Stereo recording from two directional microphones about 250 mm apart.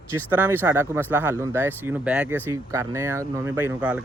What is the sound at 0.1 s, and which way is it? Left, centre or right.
Speech, centre.